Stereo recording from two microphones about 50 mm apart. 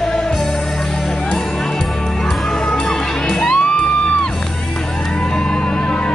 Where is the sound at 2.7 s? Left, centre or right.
Centre.